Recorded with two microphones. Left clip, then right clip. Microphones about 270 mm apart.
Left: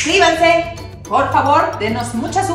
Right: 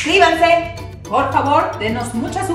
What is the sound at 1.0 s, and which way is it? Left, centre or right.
Speech, centre.